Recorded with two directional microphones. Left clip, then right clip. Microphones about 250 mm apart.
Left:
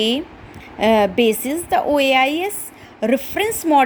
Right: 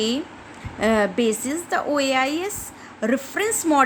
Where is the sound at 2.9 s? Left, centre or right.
Centre.